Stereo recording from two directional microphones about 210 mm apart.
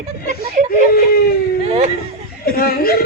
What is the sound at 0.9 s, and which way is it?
Wail, 45° left (ahead or behind).